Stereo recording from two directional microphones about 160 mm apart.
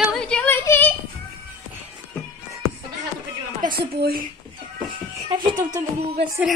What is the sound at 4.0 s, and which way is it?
Speech, 65° right (ahead or behind).